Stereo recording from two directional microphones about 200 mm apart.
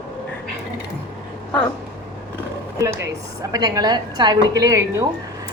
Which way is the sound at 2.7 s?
15° right (ahead or behind).